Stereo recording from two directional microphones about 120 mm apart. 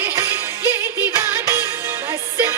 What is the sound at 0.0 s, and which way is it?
Music, 20° right (ahead or behind).